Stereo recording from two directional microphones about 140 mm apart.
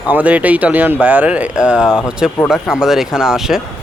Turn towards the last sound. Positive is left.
turn(degrees=-5)  # may be behind; listen again after turning